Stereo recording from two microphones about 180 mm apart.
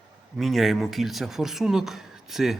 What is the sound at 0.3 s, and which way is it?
Speech, centre (ahead or behind).